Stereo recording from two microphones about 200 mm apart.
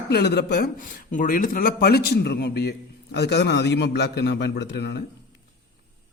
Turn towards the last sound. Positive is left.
turn(degrees=60)  # may be behind; listen again after turning